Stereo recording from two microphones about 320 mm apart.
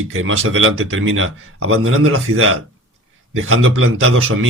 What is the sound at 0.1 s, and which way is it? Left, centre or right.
Speech, right.